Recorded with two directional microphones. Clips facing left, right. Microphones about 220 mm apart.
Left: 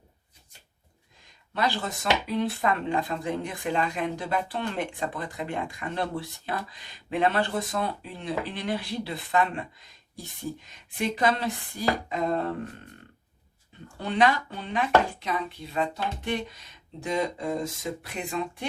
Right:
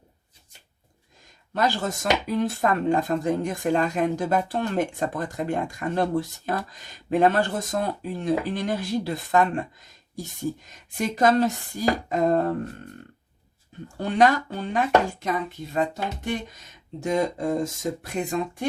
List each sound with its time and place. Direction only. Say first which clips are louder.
1.5 s speech: right 4 dB; 45° right (ahead or behind)
14.0 s speech: right 4 dB; 45° right (ahead or behind)